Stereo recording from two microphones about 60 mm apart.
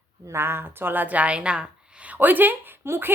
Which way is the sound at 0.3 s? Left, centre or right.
Right.